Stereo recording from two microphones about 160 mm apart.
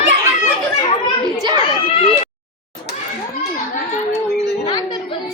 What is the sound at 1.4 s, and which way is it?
Children playing, 25° right (ahead or behind).